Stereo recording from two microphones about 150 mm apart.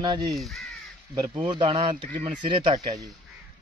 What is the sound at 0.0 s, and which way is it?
Speech, 30° right (ahead or behind).